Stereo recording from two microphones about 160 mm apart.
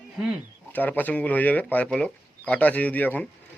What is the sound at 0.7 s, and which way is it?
Speech, 10° left (ahead or behind).